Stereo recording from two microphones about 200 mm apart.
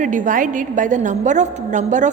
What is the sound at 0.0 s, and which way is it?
A woman's voice, 40° right (ahead or behind).